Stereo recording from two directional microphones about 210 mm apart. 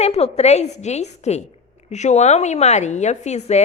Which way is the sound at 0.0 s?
30° left (ahead or behind).